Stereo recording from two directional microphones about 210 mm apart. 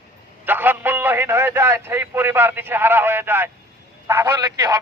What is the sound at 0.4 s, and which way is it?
A man's voice, 10° right (ahead or behind).